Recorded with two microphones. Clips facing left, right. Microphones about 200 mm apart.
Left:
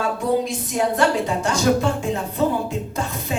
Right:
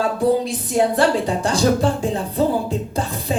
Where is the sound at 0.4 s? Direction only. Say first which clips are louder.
Right 3 dB; 35° right (ahead or behind).